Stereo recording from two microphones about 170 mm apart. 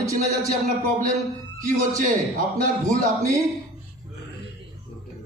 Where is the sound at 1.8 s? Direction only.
50° right (ahead or behind).